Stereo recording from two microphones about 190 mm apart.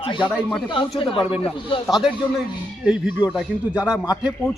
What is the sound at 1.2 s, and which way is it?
Speech, centre (ahead or behind).